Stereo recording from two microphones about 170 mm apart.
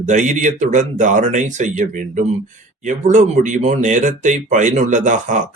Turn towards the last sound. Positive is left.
turn(degrees=-45)  # may be behind; listen again after turning